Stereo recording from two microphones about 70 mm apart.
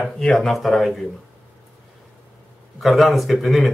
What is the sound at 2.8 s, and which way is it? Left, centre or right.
Speech, centre.